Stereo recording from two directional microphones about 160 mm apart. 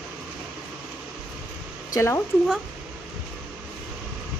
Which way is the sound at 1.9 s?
15° left (ahead or behind).